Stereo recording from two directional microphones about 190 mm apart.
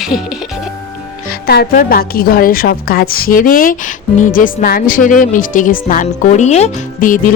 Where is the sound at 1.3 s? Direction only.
55° left (ahead or behind).